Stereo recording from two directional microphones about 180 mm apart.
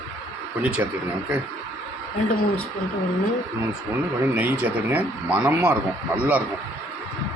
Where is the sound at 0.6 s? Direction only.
5° right (ahead or behind).